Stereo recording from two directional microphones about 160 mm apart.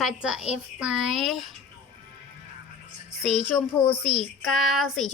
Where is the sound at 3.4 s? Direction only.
10° left (ahead or behind).